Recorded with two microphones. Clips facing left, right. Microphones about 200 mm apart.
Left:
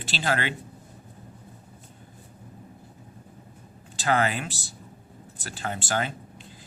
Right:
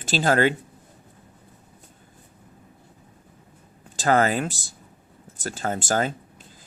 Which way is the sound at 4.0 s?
45° right (ahead or behind).